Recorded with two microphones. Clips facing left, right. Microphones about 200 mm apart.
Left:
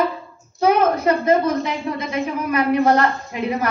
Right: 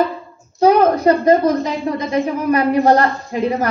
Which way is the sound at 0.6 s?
35° right (ahead or behind).